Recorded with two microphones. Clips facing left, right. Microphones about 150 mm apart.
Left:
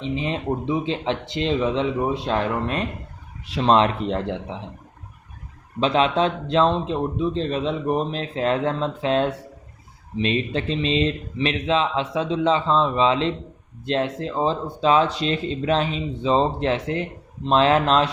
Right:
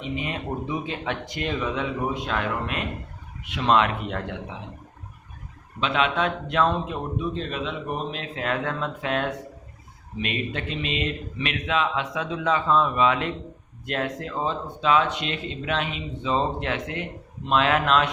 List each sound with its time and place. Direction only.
0.0 s speech: 30° left (ahead or behind)
5.8 s speech: 35° left (ahead or behind)